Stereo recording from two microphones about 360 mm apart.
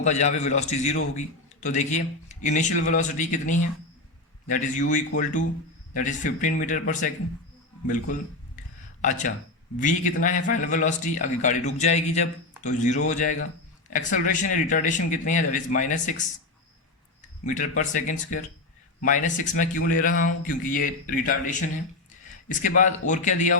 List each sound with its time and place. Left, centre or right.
0.0 s a man's voice: centre
17.4 s a man's voice: left